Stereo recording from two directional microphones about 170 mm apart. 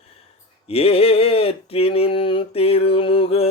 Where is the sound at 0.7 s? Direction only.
35° left (ahead or behind).